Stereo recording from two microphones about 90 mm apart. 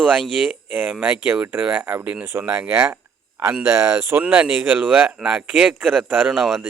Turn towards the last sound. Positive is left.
turn(degrees=-5)  # may be behind; listen again after turning